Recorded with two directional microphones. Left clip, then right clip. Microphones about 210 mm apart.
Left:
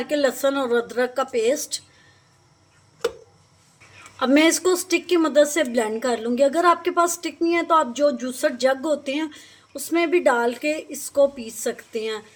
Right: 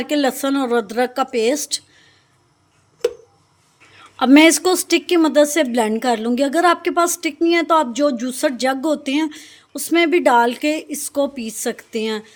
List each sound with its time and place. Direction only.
0.0 s a woman's voice: 45° right (ahead or behind)
4.2 s a woman's voice: 45° right (ahead or behind)